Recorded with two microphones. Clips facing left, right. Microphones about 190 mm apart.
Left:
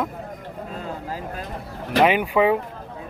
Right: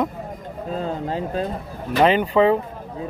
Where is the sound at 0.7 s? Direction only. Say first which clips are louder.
Right 8 dB; 30° right (ahead or behind).